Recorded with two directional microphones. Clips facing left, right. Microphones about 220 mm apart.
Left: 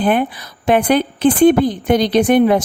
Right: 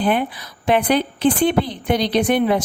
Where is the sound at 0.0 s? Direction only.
50° left (ahead or behind).